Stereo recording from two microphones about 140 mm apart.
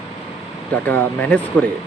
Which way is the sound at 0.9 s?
10° left (ahead or behind).